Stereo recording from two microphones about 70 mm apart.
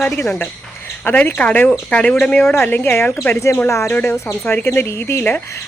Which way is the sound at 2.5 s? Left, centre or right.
Left.